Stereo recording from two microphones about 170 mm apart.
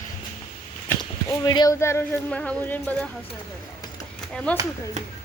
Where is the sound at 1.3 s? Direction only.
25° left (ahead or behind).